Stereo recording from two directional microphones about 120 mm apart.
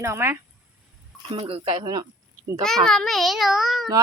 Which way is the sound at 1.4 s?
55° right (ahead or behind).